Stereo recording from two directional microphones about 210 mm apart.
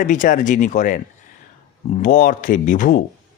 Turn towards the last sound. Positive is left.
turn(degrees=40)  # may be behind; listen again after turning